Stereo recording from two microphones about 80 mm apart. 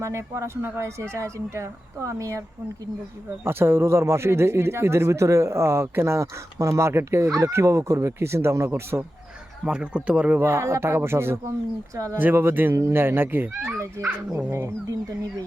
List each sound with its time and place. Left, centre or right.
0.0 s speech: right
3.4 s speech: right
9.6 s speech: centre
10.4 s speech: right